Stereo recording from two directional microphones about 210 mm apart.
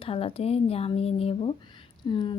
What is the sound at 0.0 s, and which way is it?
A woman's voice, 25° left (ahead or behind).